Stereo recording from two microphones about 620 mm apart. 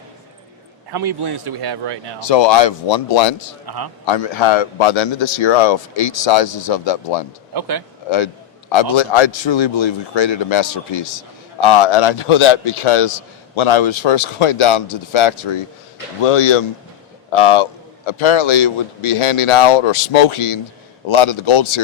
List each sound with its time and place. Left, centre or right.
0.9 s speech: right
2.2 s a man's voice: left
3.7 s speech: right
4.0 s a man's voice: left
7.5 s speech: right
8.7 s a man's voice: left